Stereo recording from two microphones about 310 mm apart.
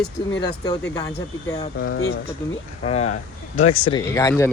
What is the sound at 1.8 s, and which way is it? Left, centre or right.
Speech, left.